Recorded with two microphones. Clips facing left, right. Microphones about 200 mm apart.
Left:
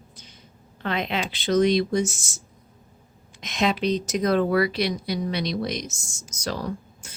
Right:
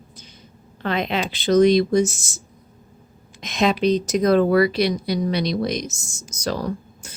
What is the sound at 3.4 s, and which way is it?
Speech, 40° right (ahead or behind).